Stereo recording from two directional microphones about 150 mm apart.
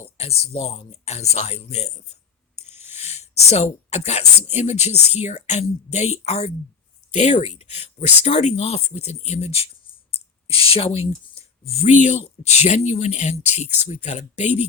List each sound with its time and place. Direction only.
0.2 s speech: 45° left (ahead or behind)